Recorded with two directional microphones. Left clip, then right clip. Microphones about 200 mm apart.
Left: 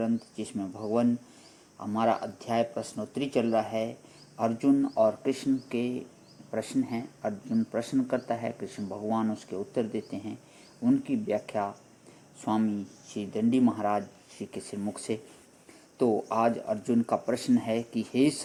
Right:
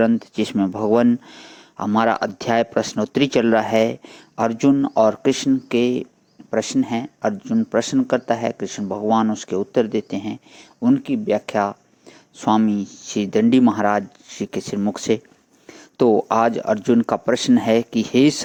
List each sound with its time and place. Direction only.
0.0 s speech: 40° right (ahead or behind)